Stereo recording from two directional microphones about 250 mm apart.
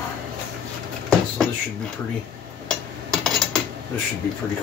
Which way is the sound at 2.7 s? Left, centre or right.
Centre.